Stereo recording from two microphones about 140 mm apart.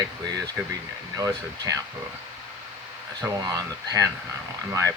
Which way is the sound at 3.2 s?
25° right (ahead or behind).